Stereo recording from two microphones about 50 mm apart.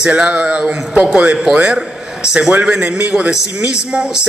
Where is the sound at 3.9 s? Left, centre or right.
Centre.